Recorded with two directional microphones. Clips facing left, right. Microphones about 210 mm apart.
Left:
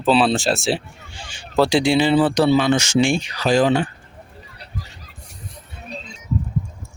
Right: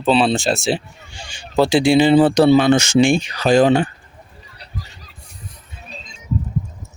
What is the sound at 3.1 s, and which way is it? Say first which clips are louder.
Speech: right 4 dB; 50° right (ahead or behind).